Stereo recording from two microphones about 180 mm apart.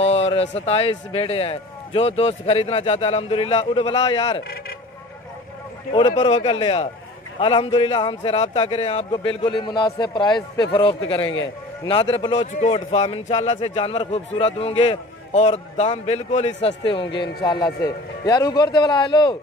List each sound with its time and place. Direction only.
0.0 s speech: 35° left (ahead or behind)
5.9 s a man's voice: 25° left (ahead or behind)
12.5 s a man's voice: 40° left (ahead or behind)